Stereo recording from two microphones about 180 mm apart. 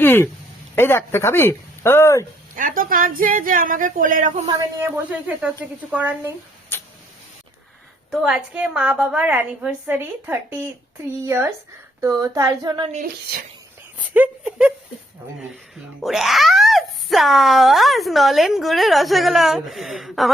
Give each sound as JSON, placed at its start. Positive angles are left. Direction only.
{"t": 0.0, "sound": "speech", "side_deg": 10}
{"t": 2.6, "sound": "speech", "side_deg": -50}
{"t": 4.4, "sound": "a woman's voice", "side_deg": -20}
{"t": 6.7, "sound": "a sound", "side_deg": 10}
{"t": 8.1, "sound": "a woman's voice", "side_deg": -5}
{"t": 14.1, "sound": "a woman's voice", "side_deg": -10}
{"t": 16.0, "sound": "a child's voice", "side_deg": 0}